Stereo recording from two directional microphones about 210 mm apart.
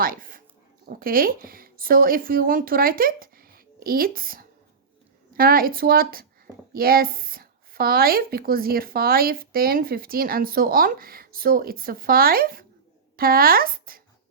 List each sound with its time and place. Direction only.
0.0 s dog: 40° right (ahead or behind)
0.9 s speech: 45° right (ahead or behind)